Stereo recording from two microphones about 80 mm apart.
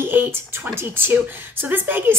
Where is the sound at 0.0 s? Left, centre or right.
Right.